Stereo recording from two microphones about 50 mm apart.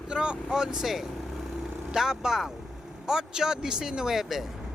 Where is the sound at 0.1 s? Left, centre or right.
Centre.